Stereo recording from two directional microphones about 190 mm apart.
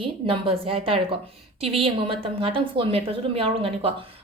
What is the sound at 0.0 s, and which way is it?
A woman's voice, 30° right (ahead or behind).